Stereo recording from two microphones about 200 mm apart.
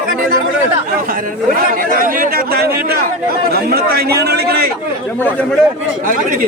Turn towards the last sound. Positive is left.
turn(degrees=-45)  # may be behind; listen again after turning